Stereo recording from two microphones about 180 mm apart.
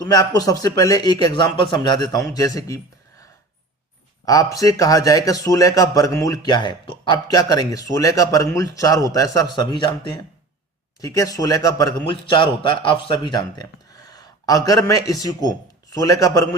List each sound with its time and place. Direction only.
0.0 s a man's voice: 20° left (ahead or behind)
4.3 s a man's voice: 20° left (ahead or behind)